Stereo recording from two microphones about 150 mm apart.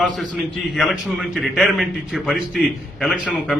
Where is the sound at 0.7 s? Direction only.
Centre (ahead or behind).